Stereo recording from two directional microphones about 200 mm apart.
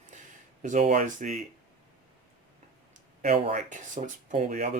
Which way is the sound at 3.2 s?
35° right (ahead or behind).